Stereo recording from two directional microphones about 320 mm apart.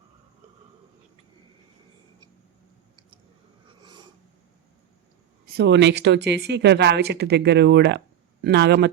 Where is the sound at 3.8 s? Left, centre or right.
Centre.